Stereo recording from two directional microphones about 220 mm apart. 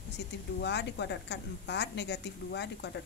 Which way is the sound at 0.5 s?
50° left (ahead or behind).